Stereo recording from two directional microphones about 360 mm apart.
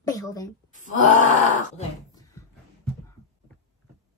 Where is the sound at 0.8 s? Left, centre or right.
Left.